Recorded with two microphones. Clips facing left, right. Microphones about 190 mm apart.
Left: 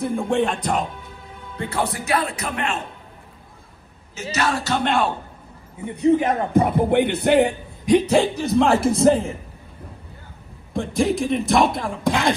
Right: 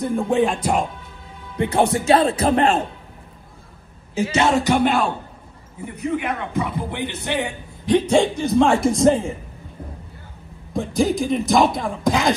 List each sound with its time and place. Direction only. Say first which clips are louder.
0.0 s speech: right 2 dB; centre (ahead or behind)
1.6 s speech: right 7 dB; 20° right (ahead or behind)
4.1 s speech: right 6 dB; 30° right (ahead or behind)
4.8 s speech: right 1 dB; centre (ahead or behind)
5.9 s a man's voice: left 7 dB; 30° left (ahead or behind)
6.5 s speech: left 8 dB; 55° left (ahead or behind)
7.8 s speech: even; 5° left (ahead or behind)
10.7 s speech: right 1 dB; centre (ahead or behind)